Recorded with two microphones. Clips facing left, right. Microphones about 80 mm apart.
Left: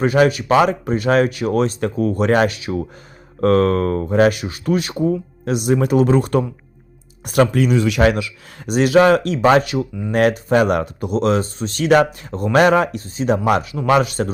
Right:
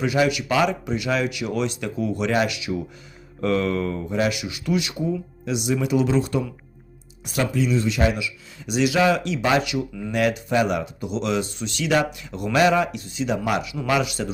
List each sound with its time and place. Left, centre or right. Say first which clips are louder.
0.0 s speech: left 6 dB; left